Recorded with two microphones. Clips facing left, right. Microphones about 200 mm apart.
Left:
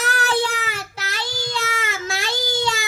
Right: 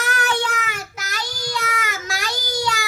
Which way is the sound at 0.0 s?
35° left (ahead or behind).